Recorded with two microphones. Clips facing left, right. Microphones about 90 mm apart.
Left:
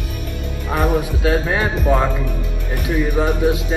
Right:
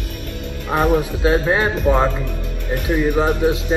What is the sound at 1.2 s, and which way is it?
Speech, 25° right (ahead or behind).